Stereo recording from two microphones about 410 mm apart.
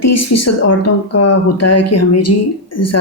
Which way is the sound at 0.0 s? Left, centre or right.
Left.